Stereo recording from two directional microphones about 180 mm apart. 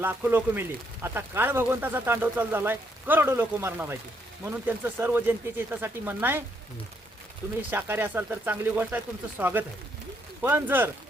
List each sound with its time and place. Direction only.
0.0 s speech: 10° right (ahead or behind)
7.7 s speech: 10° right (ahead or behind)